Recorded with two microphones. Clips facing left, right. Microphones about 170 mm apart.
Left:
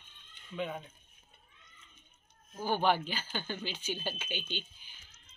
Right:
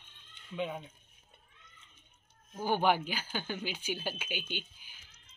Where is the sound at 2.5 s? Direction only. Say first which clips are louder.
Right 1 dB; 15° right (ahead or behind).